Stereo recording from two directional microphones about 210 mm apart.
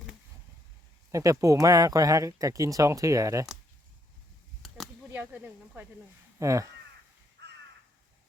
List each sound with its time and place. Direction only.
1.1 s speech: 15° right (ahead or behind)
5.0 s speech: 10° right (ahead or behind)